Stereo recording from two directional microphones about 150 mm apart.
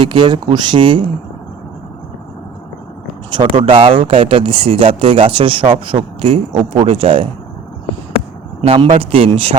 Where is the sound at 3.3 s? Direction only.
35° right (ahead or behind).